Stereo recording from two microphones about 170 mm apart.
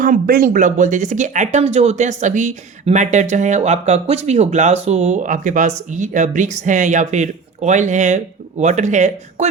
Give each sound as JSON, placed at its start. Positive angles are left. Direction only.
{"t": 0.0, "sound": "speech", "side_deg": -55}